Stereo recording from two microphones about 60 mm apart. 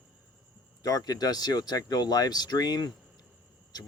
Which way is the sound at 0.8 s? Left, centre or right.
Left.